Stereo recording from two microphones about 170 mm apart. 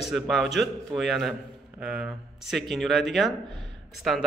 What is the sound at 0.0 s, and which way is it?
A man's voice, centre (ahead or behind).